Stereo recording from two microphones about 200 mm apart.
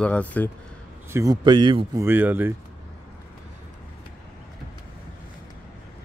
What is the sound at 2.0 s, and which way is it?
Speech, 10° right (ahead or behind).